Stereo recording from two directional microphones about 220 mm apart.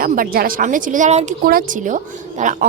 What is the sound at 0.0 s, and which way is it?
Speech, 40° right (ahead or behind).